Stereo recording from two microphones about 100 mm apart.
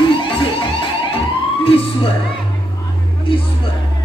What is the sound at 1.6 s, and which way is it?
Emergency vehicle, 65° left (ahead or behind).